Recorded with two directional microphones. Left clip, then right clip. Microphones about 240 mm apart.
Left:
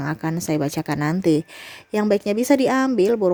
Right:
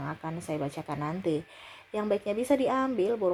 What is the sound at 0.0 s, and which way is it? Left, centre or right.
Speech, left.